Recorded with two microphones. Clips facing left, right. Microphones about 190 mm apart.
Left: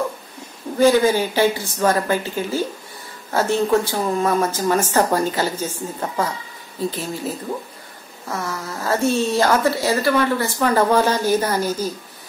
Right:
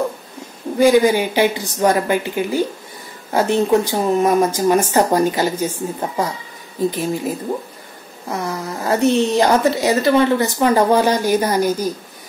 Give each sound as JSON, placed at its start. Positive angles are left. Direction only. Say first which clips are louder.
{"t": 0.7, "sound": "a woman's voice", "louder": "right 2 dB", "side_deg": -15}